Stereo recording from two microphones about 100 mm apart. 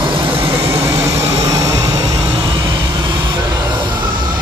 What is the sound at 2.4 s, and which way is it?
Train, 55° right (ahead or behind).